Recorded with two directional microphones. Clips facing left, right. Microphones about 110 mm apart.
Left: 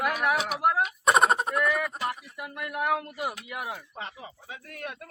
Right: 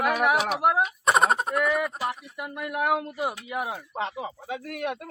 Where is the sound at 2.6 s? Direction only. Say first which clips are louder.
Right 3 dB; 15° right (ahead or behind).